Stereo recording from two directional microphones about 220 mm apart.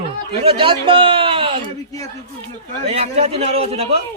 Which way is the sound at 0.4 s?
25° right (ahead or behind).